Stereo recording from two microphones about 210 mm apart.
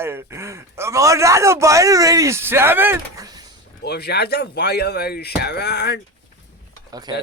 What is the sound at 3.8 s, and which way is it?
Speech, 50° left (ahead or behind).